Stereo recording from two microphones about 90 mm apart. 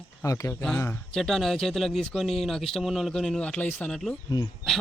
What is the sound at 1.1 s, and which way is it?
Speech, 5° left (ahead or behind).